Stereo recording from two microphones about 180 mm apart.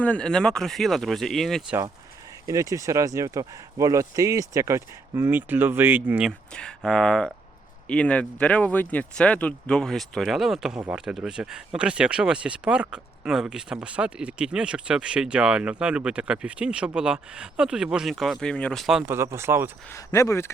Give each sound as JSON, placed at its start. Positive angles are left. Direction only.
{"t": 0.0, "sound": "speech", "side_deg": 5}
{"t": 2.5, "sound": "speech", "side_deg": -20}
{"t": 6.5, "sound": "speech", "side_deg": 5}
{"t": 19.1, "sound": "speech", "side_deg": -15}
{"t": 19.9, "sound": "speech", "side_deg": 20}